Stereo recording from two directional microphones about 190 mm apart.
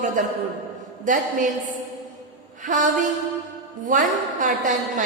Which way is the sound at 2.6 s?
40° right (ahead or behind).